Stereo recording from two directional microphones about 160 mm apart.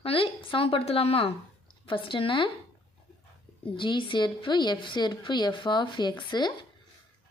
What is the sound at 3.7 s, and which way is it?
A woman's voice, 30° left (ahead or behind).